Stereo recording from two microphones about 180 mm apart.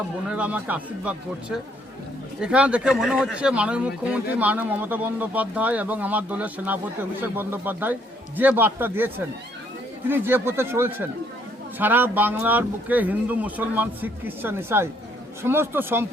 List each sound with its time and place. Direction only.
0.3 s speech: 5° right (ahead or behind)